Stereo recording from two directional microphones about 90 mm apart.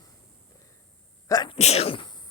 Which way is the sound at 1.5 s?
80° left.